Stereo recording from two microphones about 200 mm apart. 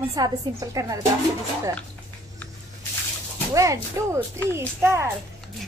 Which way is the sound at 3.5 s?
15° right (ahead or behind).